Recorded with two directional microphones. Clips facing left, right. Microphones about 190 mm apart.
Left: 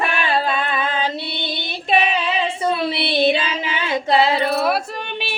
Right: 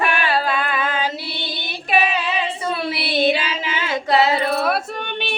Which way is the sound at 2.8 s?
25° left (ahead or behind).